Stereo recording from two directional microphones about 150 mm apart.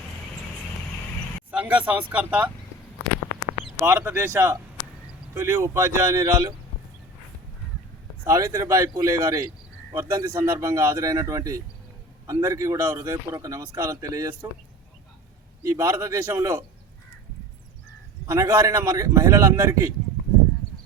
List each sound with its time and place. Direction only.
1.5 s speech: 10° right (ahead or behind)
3.6 s speech: 15° right (ahead or behind)
8.2 s a man's voice: 20° right (ahead or behind)
15.6 s a man's voice: 20° right (ahead or behind)
18.3 s a man's voice: 20° right (ahead or behind)